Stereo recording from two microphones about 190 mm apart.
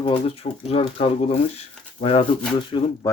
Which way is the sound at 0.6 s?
30° left (ahead or behind).